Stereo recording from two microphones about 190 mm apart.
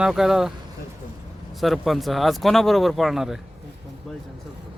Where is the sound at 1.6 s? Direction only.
Centre (ahead or behind).